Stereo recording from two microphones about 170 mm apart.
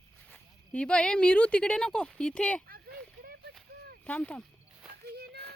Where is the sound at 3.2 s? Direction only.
70° right (ahead or behind).